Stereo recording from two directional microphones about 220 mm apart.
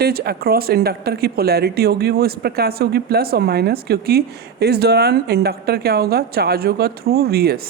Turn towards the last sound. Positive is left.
turn(degrees=-45)  # may be behind; listen again after turning